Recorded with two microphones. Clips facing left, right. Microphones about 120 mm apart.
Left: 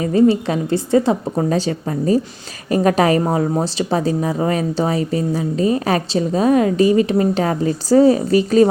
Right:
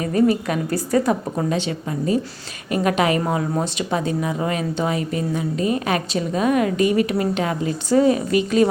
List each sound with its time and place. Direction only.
0.0 s a woman's voice: 30° left (ahead or behind)